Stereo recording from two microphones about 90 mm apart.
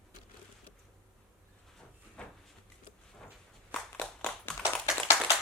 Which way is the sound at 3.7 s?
15° left (ahead or behind).